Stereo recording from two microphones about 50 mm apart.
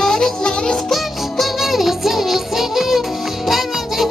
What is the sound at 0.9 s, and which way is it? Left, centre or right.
Music, centre.